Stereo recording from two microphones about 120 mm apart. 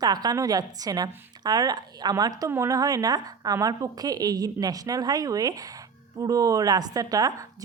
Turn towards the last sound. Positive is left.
turn(degrees=-30)  # may be behind; listen again after turning